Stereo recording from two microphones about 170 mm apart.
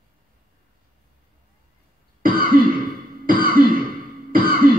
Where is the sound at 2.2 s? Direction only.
60° right (ahead or behind).